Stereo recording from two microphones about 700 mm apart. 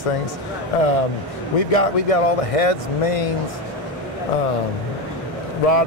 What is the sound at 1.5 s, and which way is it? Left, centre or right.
Speech, left.